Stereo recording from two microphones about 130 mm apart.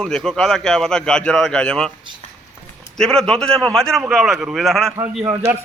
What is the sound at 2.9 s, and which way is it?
Speech, 5° left (ahead or behind).